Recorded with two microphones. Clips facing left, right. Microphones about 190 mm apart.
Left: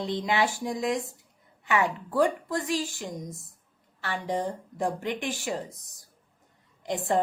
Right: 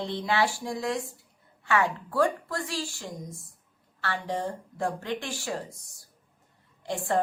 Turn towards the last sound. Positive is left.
turn(degrees=20)  # may be behind; listen again after turning